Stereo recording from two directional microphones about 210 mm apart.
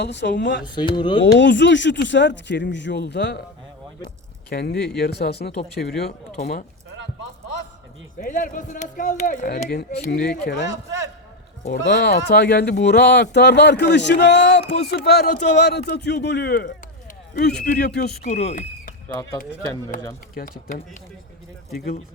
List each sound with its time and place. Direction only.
0.0 s speech: 55° left (ahead or behind)
0.6 s speech: 20° left (ahead or behind)
1.2 s speech: 55° left (ahead or behind)
4.4 s speech: 50° left (ahead or behind)
8.2 s speech: 40° left (ahead or behind)
11.7 s speech: 45° left (ahead or behind)
18.2 s speech: 35° left (ahead or behind)
19.0 s speech: 10° left (ahead or behind)
20.3 s speech: 40° left (ahead or behind)